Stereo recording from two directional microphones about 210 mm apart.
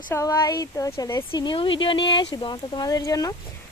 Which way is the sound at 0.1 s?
15° left (ahead or behind).